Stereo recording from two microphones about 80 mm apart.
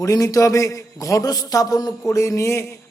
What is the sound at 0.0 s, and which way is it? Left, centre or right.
A man's voice, left.